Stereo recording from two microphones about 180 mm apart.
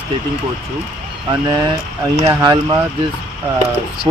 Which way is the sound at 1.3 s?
20° right (ahead or behind).